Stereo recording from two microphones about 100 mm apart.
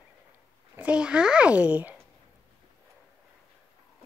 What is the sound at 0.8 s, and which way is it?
A child's voice, 10° right (ahead or behind).